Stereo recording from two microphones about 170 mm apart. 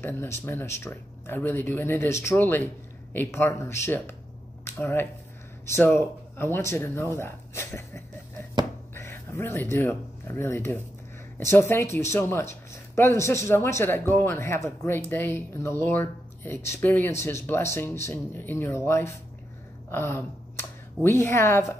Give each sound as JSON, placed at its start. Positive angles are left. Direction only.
{"t": 0.0, "sound": "speech", "side_deg": 15}